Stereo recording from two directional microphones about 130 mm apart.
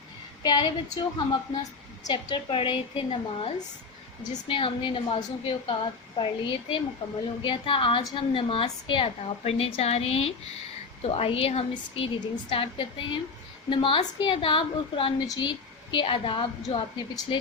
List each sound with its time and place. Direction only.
0.4 s a woman's voice: 35° left (ahead or behind)
2.0 s a woman's voice: 40° left (ahead or behind)